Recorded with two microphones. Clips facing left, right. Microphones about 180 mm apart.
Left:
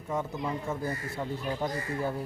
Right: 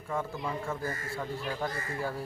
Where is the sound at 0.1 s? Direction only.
20° left (ahead or behind).